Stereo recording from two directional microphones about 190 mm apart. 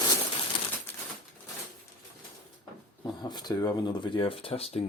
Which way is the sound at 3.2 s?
20° left (ahead or behind).